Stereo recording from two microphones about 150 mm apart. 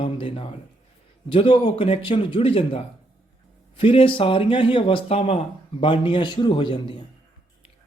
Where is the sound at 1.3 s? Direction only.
35° left (ahead or behind).